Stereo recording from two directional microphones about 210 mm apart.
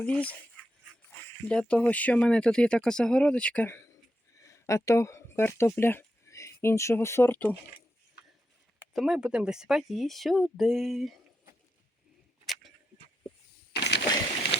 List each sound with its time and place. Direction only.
0.0 s speech: 5° left (ahead or behind)
8.8 s speech: centre (ahead or behind)
13.7 s a sound: 55° left (ahead or behind)